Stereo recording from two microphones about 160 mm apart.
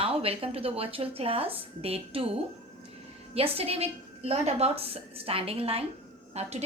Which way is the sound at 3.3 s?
35° right (ahead or behind).